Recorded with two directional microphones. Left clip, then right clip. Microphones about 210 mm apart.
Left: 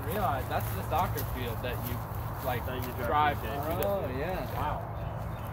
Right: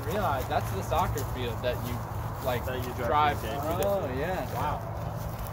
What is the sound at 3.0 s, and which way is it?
Speech, 55° right (ahead or behind).